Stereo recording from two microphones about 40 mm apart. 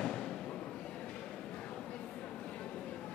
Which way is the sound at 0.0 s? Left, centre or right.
Left.